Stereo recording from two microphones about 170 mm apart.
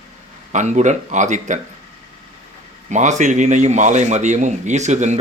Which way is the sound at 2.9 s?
45° right (ahead or behind).